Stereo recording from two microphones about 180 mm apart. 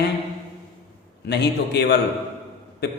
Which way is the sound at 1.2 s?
70° left (ahead or behind).